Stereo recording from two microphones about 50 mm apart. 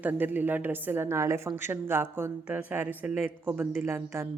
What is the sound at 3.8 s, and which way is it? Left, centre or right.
Speech, right.